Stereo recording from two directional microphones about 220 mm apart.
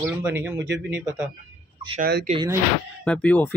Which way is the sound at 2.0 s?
45° right (ahead or behind).